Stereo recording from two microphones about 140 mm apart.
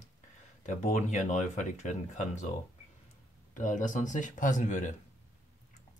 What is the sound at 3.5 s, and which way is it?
Speech, 65° left (ahead or behind).